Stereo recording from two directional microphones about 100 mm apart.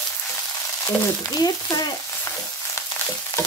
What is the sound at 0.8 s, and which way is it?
Speech, 35° left (ahead or behind).